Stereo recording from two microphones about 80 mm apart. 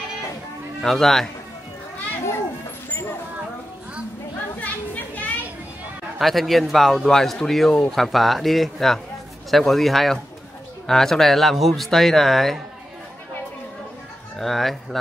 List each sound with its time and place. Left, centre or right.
0.8 s speech: centre
2.9 s vehicle: left
4.6 s chatter: left
6.1 s speech: centre
14.4 s speech: centre